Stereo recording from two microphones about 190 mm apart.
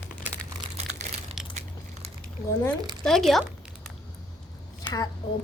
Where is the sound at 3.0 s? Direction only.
Centre (ahead or behind).